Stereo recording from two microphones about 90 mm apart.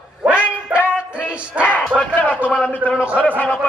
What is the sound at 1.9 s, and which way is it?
Speech, centre (ahead or behind).